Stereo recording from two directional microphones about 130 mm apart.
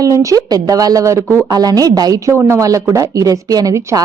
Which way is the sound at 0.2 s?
25° right (ahead or behind).